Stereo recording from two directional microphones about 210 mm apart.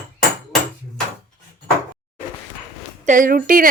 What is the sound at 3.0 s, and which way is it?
Speech, 40° right (ahead or behind).